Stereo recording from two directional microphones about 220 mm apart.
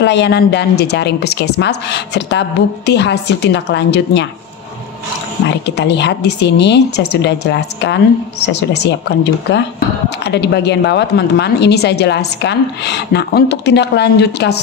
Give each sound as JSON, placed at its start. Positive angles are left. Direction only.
{"t": 0.0, "sound": "a woman's voice", "side_deg": 50}
{"t": 5.8, "sound": "a woman's voice", "side_deg": 50}